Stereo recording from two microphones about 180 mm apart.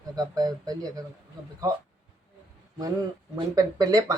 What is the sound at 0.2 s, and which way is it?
Speech, 20° right (ahead or behind).